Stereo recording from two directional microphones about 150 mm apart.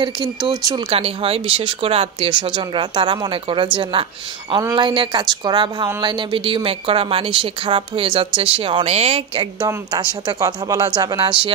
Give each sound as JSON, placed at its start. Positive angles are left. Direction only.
{"t": 0.0, "sound": "speech", "side_deg": -30}
{"t": 0.8, "sound": "a woman's voice", "side_deg": -40}